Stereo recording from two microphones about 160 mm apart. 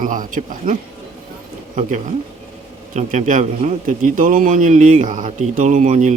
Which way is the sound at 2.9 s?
50° right (ahead or behind).